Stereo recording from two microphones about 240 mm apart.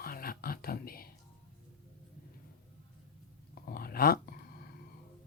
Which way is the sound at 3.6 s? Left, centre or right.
Left.